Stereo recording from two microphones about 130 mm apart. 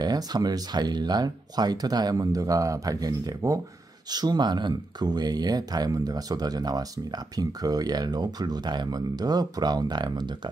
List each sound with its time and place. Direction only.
0.0 s speech: 30° right (ahead or behind)